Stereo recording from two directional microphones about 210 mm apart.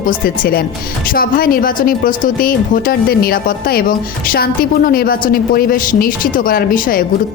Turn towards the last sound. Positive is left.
turn(degrees=45)  # may be behind; listen again after turning